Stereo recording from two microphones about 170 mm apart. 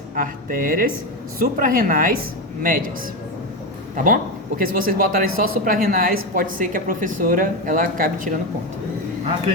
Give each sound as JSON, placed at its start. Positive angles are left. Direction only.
{"t": 0.2, "sound": "speech", "side_deg": -55}
{"t": 3.9, "sound": "speech", "side_deg": -55}